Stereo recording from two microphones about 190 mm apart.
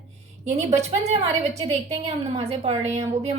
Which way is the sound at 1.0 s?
35° right (ahead or behind).